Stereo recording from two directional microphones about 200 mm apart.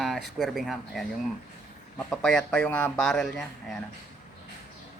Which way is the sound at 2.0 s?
5° left (ahead or behind).